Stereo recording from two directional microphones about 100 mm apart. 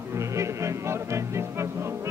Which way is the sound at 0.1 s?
30° right (ahead or behind).